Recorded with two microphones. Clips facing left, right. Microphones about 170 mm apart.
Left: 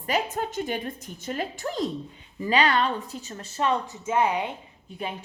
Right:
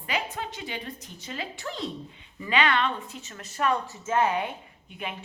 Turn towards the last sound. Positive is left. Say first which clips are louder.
# left 3 dB
turn(degrees=35)  # may be behind; listen again after turning